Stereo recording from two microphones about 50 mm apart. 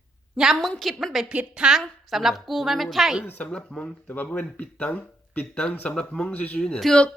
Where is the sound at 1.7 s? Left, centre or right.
Centre.